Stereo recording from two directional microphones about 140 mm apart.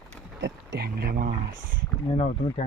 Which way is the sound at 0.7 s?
90° right.